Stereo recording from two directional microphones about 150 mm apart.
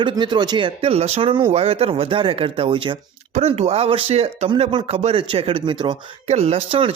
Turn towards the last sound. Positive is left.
turn(degrees=-40)  # may be behind; listen again after turning